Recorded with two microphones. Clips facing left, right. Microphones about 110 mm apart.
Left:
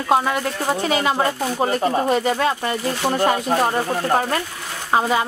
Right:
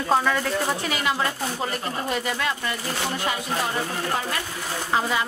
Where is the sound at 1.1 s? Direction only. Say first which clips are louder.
Left 6 dB; 40° left (ahead or behind).